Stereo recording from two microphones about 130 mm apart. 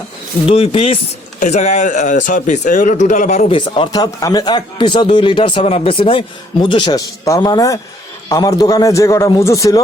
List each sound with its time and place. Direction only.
0.4 s speech: 50° left (ahead or behind)
1.4 s speech: 60° left (ahead or behind)
3.5 s a man's voice: 40° left (ahead or behind)